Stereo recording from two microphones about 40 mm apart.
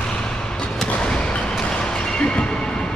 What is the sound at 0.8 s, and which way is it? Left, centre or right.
Basketball bounce, centre.